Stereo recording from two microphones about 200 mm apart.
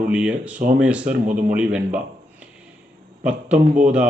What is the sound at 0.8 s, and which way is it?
A man's voice, 5° right (ahead or behind).